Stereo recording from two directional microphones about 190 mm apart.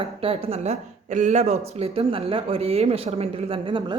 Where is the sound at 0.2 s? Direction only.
30° right (ahead or behind).